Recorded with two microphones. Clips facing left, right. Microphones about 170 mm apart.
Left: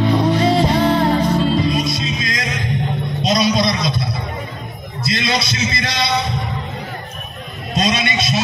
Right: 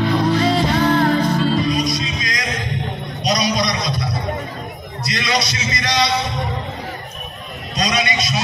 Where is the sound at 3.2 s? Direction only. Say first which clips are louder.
Left 3 dB; 25° left (ahead or behind).